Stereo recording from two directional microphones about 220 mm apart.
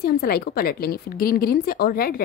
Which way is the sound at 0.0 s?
45° left (ahead or behind).